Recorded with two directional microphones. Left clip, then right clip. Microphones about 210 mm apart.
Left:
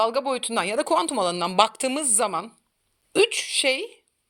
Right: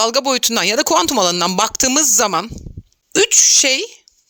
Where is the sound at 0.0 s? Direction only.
60° right (ahead or behind).